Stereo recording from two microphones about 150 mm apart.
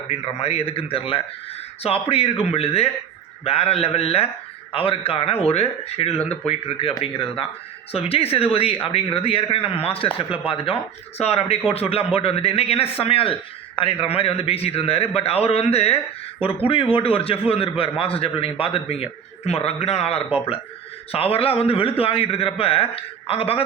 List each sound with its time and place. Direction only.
0.1 s a man's voice: 40° left (ahead or behind)